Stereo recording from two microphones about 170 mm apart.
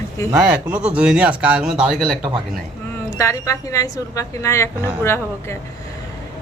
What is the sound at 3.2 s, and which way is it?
A woman's voice, 15° left (ahead or behind).